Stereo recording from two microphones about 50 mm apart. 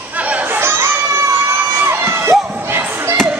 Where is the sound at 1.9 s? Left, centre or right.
Right.